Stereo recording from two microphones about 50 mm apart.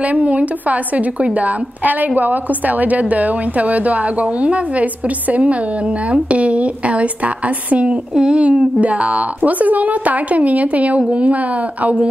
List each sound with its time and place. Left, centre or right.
0.1 s a woman's voice: right
8.4 s a woman's voice: right